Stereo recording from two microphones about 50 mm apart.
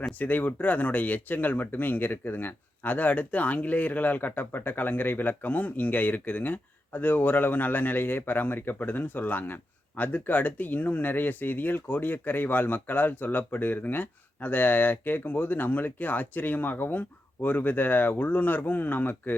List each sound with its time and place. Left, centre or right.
0.2 s speech: left